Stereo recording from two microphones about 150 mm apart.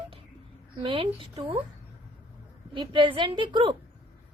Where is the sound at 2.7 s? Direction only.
35° right (ahead or behind).